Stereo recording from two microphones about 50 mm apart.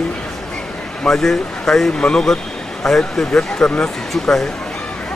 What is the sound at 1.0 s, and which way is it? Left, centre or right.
Speech, centre.